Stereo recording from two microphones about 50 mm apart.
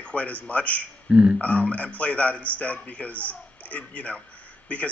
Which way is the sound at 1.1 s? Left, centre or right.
Right.